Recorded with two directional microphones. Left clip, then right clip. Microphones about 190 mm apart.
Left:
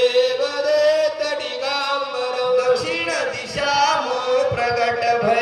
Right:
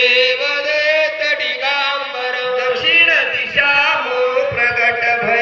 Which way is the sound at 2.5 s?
90° left.